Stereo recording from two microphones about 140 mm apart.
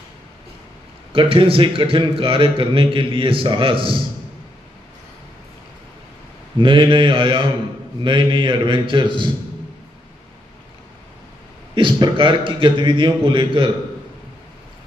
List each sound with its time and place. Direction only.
1.1 s a man's voice: 40° right (ahead or behind)
6.6 s a man's voice: 35° right (ahead or behind)
11.7 s a man's voice: 35° right (ahead or behind)